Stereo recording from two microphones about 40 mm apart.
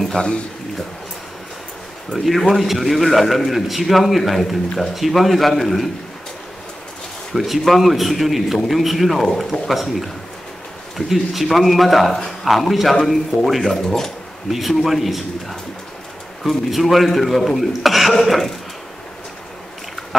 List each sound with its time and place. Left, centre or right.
0.1 s speech: left
2.1 s a man's voice: centre
7.3 s a man's voice: centre
14.5 s a man's voice: centre